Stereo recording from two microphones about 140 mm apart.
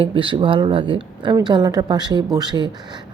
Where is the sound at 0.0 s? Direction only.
35° right (ahead or behind).